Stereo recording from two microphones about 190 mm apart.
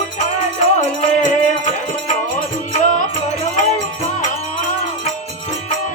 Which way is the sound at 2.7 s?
45° left (ahead or behind).